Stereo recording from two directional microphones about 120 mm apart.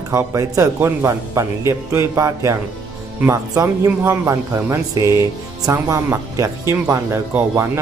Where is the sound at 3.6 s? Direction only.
20° right (ahead or behind).